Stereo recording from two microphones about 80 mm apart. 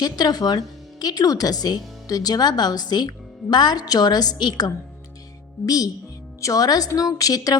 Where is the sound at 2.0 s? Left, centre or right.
Left.